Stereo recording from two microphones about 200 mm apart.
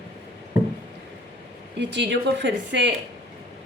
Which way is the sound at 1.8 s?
60° right (ahead or behind).